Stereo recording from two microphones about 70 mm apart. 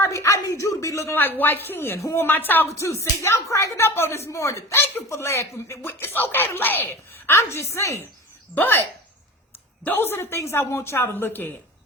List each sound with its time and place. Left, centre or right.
0.1 s a sound: left
1.1 s a woman's voice: left
2.2 s speech: left
2.7 s speech: left
5.9 s a woman's voice: left
8.5 s speech: left
9.8 s a woman's voice: left